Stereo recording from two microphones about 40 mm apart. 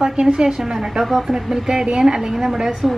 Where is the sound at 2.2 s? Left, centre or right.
Centre.